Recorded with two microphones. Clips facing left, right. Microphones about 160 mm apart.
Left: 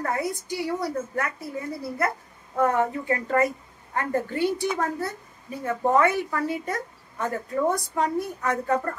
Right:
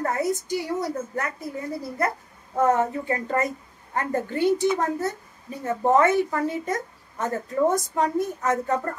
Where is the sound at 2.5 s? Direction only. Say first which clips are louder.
Right 2 dB; 20° right (ahead or behind).